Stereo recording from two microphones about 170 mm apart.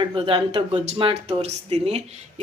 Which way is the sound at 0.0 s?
30° right (ahead or behind).